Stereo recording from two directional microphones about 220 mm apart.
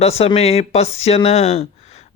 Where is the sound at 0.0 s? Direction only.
30° left (ahead or behind).